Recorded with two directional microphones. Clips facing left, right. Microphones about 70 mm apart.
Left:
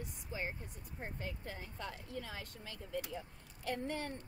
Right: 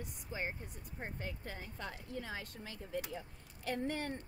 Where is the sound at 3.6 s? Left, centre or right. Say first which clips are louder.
Right 1 dB; right.